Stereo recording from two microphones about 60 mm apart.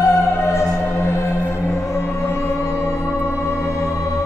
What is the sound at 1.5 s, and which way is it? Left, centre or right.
Music, left.